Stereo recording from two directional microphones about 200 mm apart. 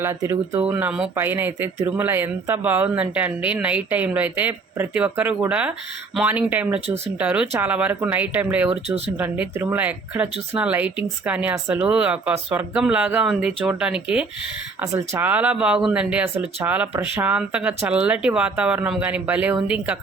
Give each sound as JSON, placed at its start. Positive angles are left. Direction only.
{"t": 0.0, "sound": "speech", "side_deg": -15}